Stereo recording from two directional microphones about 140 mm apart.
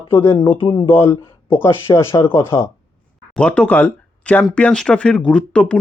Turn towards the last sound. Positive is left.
turn(degrees=10)  # may be behind; listen again after turning